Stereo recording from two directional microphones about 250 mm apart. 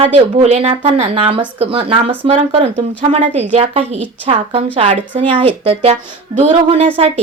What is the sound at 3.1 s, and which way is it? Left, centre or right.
A woman's voice, right.